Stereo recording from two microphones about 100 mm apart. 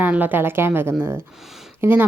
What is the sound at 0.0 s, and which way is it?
A woman's voice, 15° right (ahead or behind).